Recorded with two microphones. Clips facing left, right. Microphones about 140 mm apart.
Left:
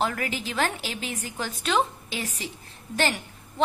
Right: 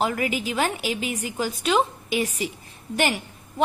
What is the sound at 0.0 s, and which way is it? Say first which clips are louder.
A woman's voice: right 4 dB; 10° right (ahead or behind).